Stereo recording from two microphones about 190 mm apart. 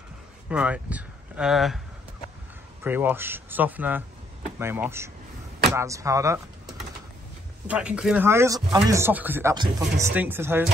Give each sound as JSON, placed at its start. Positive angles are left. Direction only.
{"t": 0.5, "sound": "speech", "side_deg": -5}
{"t": 2.8, "sound": "a man's voice", "side_deg": -10}
{"t": 7.6, "sound": "a man's voice", "side_deg": -5}